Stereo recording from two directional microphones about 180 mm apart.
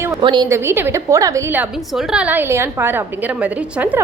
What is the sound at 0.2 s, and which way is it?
Speech, 25° right (ahead or behind).